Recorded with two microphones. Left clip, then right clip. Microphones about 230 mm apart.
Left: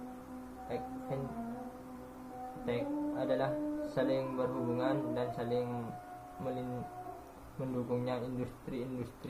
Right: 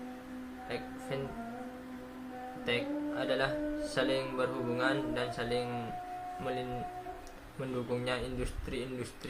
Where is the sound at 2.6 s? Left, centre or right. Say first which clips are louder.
Right 2 dB; right.